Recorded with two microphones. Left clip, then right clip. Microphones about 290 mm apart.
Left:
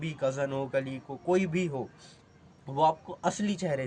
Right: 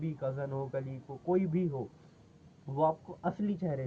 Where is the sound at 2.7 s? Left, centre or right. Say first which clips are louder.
Left 5 dB; centre.